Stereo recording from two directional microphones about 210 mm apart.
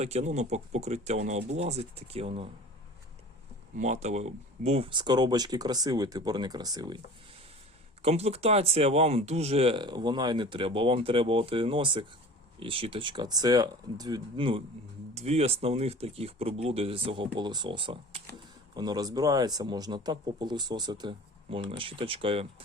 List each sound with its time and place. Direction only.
0.0 s speech: 30° right (ahead or behind)
3.8 s speech: 35° right (ahead or behind)
8.0 s speech: 30° right (ahead or behind)